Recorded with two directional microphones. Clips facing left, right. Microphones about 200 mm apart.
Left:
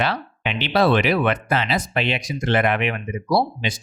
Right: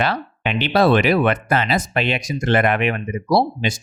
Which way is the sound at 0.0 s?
50° right (ahead or behind).